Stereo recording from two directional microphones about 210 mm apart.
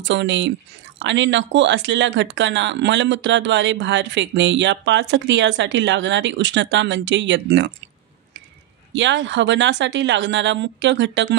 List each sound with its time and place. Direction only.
0.0 s speech: 60° right (ahead or behind)
8.9 s speech: 60° right (ahead or behind)